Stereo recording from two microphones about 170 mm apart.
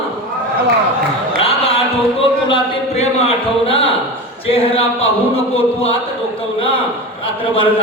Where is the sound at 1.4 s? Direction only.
35° left (ahead or behind).